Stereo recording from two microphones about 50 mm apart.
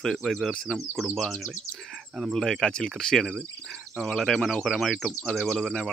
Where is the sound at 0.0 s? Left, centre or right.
Centre.